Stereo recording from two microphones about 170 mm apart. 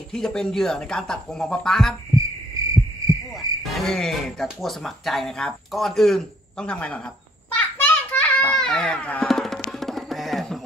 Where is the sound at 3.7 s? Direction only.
Centre (ahead or behind).